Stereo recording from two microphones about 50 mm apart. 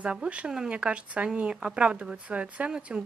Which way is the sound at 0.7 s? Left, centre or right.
Right.